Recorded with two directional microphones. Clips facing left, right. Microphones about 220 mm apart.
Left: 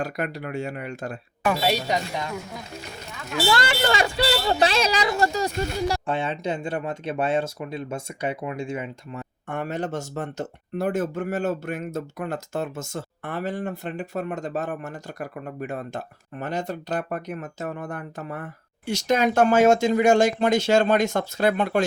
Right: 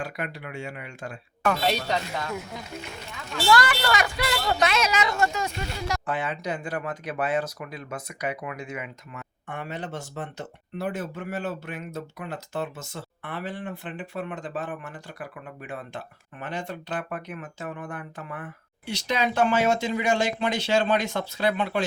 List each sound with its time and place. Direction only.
0.0 s speech: 40° left (ahead or behind)
1.5 s speech: 5° left (ahead or behind)
3.4 s speech: 25° left (ahead or behind)
6.1 s speech: 25° left (ahead or behind)
9.5 s speech: 45° left (ahead or behind)